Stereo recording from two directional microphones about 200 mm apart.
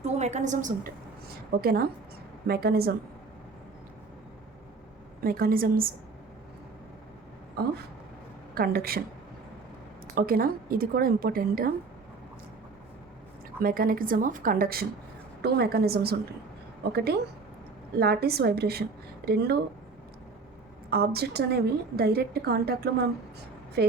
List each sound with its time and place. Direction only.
0.0 s a woman's voice: 35° right (ahead or behind); by 2.9 s 50° right (ahead or behind)
5.2 s a woman's voice: 45° right (ahead or behind)
8.5 s a woman's voice: 50° right (ahead or behind)
10.2 s a woman's voice: 45° right (ahead or behind)
13.6 s a woman's voice: 45° right (ahead or behind)
20.9 s a woman's voice: 50° right (ahead or behind)